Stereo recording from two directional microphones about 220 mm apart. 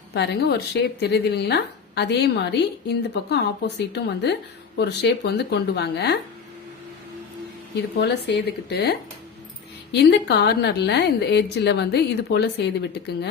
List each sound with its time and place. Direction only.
0.1 s a woman's voice: 50° left (ahead or behind)
7.8 s a woman's voice: 50° left (ahead or behind)